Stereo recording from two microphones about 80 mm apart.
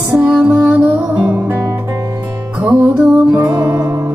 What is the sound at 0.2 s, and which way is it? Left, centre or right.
Music, centre.